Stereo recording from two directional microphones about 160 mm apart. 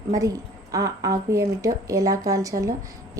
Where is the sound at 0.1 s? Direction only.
20° right (ahead or behind).